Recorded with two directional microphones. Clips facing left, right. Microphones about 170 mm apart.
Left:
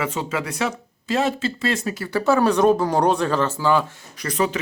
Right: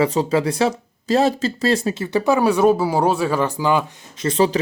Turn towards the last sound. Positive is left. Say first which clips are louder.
# right 5 dB
turn(degrees=-30)  # may be behind; listen again after turning